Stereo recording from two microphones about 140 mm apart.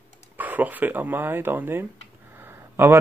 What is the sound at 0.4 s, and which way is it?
Speech, 10° right (ahead or behind).